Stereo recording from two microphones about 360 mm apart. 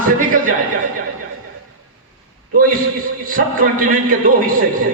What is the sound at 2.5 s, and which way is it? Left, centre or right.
A man's voice, right.